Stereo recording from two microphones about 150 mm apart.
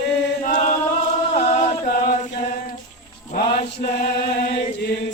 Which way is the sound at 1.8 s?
80° left.